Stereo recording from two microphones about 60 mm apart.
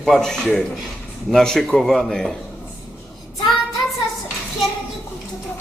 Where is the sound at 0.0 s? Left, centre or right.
Centre.